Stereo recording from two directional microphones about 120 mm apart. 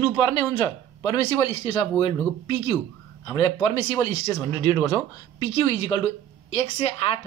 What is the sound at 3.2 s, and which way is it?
Speech, 40° left (ahead or behind).